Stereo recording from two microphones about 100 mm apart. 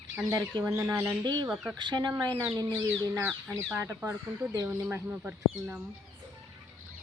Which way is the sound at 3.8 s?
25° right (ahead or behind).